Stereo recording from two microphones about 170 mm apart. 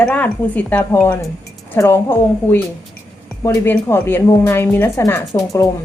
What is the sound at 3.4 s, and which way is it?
Speech, 15° left (ahead or behind).